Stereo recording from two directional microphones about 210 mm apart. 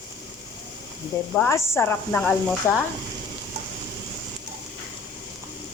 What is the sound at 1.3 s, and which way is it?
A woman's voice, 10° left (ahead or behind).